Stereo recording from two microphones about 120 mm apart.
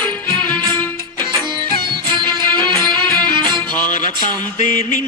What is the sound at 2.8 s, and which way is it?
Music, 5° left (ahead or behind).